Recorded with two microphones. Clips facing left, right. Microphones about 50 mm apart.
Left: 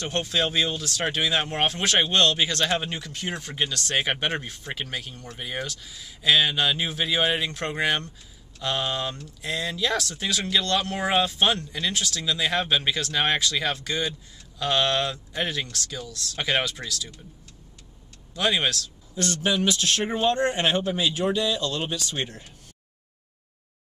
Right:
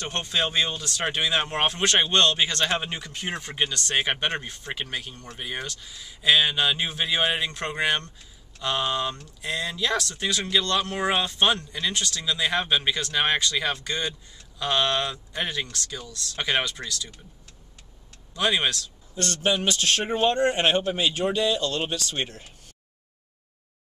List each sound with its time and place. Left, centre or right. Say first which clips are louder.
0.0 s speech: left 1 dB; centre
18.3 s speech: even; centre
19.4 s speech: even; centre
19.7 s a man's voice: even; centre
20.8 s speech: even; centre
21.1 s speech: right 1 dB; centre